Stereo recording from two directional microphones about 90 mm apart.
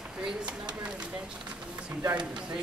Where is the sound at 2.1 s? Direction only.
10° right (ahead or behind).